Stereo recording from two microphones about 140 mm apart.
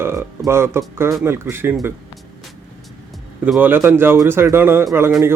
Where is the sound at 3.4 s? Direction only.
10° right (ahead or behind).